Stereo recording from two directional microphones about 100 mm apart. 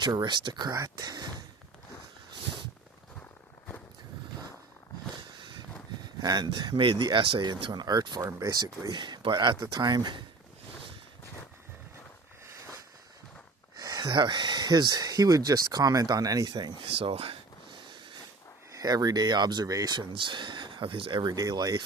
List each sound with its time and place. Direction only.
0.0 s speech: 50° right (ahead or behind)
6.0 s speech: 45° right (ahead or behind)
13.7 s speech: 40° right (ahead or behind)
16.8 s a sound: 70° right (ahead or behind)
17.8 s a sound: 50° right (ahead or behind)
18.7 s speech: 40° right (ahead or behind); by 21.2 s 60° right (ahead or behind)
21.2 s speech: 40° right (ahead or behind)